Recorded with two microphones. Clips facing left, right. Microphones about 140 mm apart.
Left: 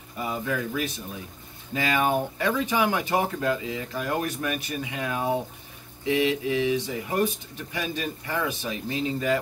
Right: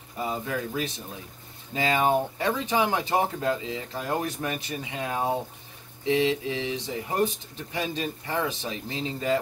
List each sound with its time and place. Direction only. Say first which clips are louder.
0.2 s speech: left 1 dB; 25° right (ahead or behind)